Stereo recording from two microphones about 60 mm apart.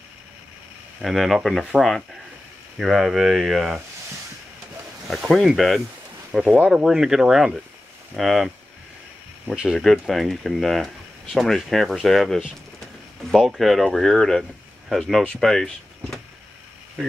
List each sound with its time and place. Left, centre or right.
1.0 s speech: centre
5.3 s speech: centre
9.8 s speech: centre
12.8 s a sound: centre
13.6 s speech: centre